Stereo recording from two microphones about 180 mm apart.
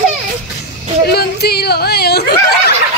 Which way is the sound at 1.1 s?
60° left (ahead or behind).